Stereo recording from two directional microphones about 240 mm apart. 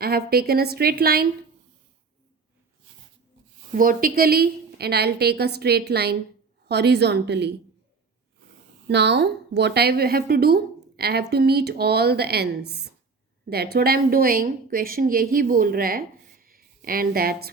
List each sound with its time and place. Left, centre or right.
0.0 s a woman's voice: right
3.8 s a woman's voice: right
8.9 s a woman's voice: right